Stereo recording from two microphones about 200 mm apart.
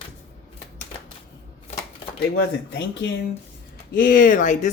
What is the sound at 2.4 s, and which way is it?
Speech, 60° left (ahead or behind).